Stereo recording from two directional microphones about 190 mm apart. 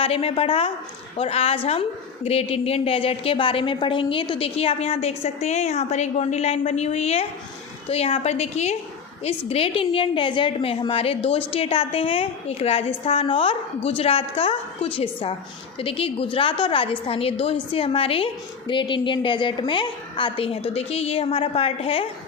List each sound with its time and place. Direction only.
0.0 s a woman's voice: 30° left (ahead or behind)